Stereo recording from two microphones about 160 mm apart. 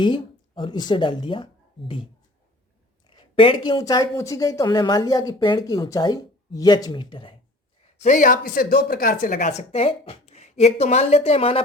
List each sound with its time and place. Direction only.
0.0 s a woman's voice: 30° left (ahead or behind)
3.1 s a woman's voice: 35° left (ahead or behind)
7.9 s speech: 50° left (ahead or behind)